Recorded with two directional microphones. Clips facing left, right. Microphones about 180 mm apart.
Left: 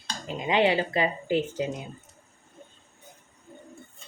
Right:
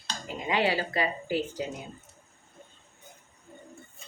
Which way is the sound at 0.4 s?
20° left (ahead or behind).